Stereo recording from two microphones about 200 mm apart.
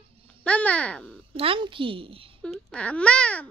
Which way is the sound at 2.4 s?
5° left (ahead or behind).